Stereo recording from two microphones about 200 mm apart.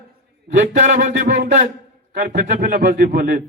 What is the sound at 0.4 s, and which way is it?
A man's voice, 40° right (ahead or behind).